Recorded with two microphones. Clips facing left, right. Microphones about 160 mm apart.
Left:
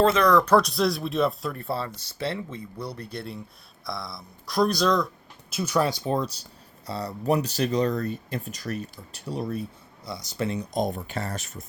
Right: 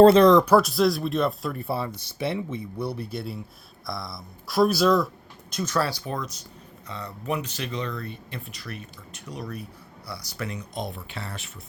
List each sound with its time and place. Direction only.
0.0 s speech: 35° right (ahead or behind)
0.3 s speech: 20° right (ahead or behind)
0.5 s speech: centre (ahead or behind)
1.7 s speech: 15° right (ahead or behind)
5.5 s speech: 10° left (ahead or behind); by 11.6 s 40° left (ahead or behind)